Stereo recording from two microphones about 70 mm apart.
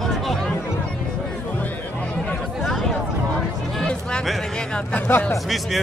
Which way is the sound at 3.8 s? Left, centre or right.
Centre.